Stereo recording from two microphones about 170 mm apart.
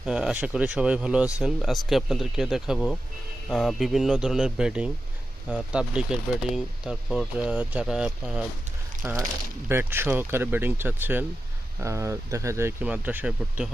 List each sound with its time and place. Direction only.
0.0 s speech: 5° right (ahead or behind)